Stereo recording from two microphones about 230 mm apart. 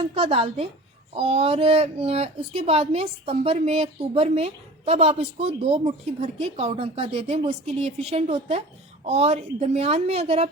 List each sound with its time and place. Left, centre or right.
0.0 s speech: right